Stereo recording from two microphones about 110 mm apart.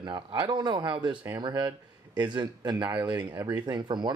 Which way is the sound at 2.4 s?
40° right (ahead or behind).